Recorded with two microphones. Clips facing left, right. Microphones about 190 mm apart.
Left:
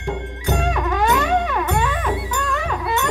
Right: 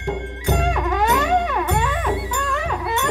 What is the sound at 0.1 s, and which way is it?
Music, 25° right (ahead or behind).